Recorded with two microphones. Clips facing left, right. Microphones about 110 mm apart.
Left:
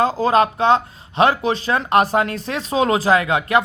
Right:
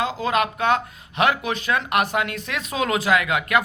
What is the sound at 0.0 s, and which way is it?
Speech, 35° left (ahead or behind).